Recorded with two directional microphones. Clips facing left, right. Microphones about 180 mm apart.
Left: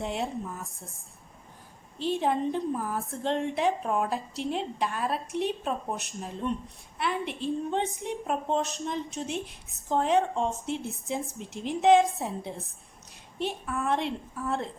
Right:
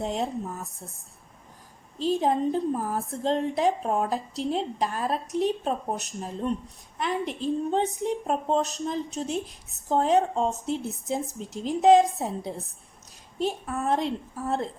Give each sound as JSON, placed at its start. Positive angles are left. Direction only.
{"t": 0.0, "sound": "a woman's voice", "side_deg": -40}
{"t": 2.0, "sound": "a woman's voice", "side_deg": -40}